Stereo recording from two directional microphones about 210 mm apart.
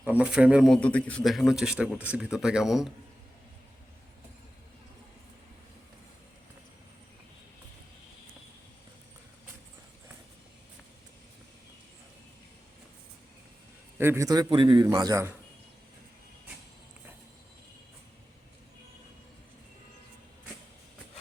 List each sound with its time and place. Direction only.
0.0 s speech: 5° right (ahead or behind)
14.0 s a man's voice: 15° right (ahead or behind)